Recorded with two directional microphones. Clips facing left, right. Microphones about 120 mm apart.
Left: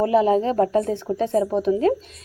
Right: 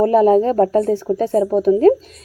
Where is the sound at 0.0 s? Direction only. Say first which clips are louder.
Right 5 dB; 45° right (ahead or behind).